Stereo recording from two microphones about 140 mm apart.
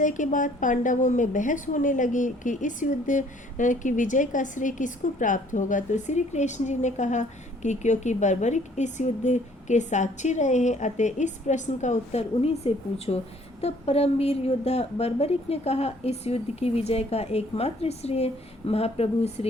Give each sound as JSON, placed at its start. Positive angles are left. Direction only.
{"t": 0.0, "sound": "a woman's voice", "side_deg": 65}